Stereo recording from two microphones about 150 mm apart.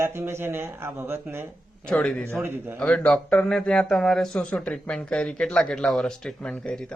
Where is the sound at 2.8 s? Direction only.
5° left (ahead or behind).